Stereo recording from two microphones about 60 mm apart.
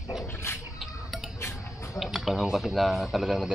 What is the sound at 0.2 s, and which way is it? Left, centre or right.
Dog, left.